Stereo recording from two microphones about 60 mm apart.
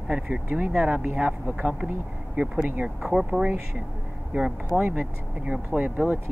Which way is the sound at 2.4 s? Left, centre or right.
Right.